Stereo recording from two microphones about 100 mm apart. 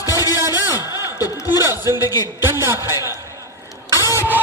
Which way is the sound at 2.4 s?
25° right (ahead or behind).